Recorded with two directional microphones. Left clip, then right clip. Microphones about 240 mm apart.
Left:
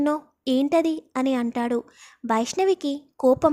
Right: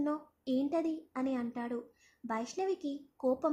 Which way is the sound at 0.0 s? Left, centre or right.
Left.